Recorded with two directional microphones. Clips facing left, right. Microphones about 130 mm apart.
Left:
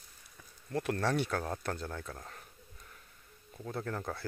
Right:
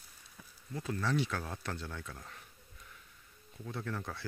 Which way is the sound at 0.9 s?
55° left (ahead or behind).